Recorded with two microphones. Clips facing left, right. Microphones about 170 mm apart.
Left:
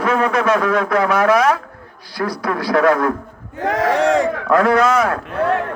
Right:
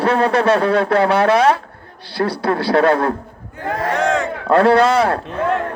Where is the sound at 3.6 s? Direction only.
90° left.